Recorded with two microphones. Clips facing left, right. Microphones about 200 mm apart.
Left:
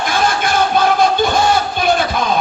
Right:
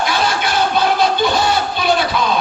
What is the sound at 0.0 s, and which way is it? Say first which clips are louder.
Music: left 1 dB; 50° left (ahead or behind).